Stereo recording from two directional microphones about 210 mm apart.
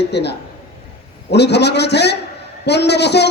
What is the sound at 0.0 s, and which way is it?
A man's voice, 55° left (ahead or behind).